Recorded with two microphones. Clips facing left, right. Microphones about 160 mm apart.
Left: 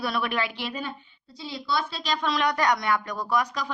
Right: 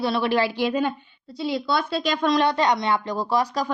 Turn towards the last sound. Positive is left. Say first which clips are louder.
# right 4 dB
turn(degrees=-30)  # may be behind; listen again after turning